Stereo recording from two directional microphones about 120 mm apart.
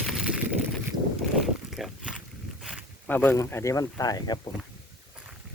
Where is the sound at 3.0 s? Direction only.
15° left (ahead or behind); by 4.4 s 35° left (ahead or behind).